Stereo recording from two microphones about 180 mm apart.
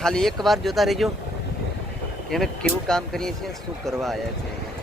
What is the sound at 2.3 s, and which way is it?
Speech, 5° left (ahead or behind).